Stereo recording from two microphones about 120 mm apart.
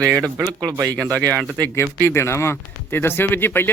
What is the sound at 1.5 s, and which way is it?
Speech, 15° left (ahead or behind).